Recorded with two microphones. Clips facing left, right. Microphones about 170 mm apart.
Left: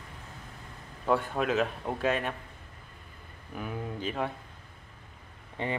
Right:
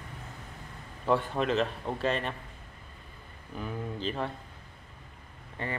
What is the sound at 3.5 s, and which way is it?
Speech, 5° left (ahead or behind).